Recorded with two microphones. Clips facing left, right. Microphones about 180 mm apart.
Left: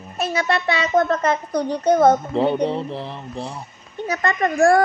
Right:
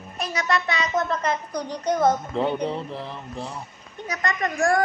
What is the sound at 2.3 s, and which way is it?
Speech, 30° left (ahead or behind).